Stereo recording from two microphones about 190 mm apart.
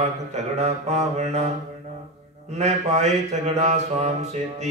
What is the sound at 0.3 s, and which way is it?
Speech, 35° right (ahead or behind).